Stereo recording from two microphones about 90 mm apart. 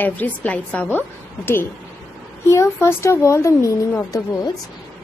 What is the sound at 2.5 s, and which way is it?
Speech, 30° left (ahead or behind).